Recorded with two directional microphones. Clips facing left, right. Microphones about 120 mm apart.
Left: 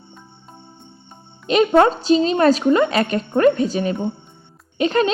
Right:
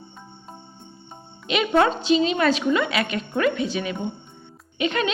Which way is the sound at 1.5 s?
40° left (ahead or behind).